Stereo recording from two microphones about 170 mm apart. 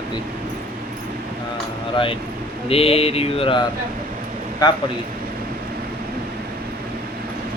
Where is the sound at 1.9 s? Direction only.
30° left (ahead or behind).